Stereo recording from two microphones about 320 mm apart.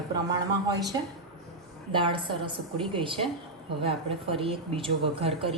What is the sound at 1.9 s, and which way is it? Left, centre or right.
Speech, centre.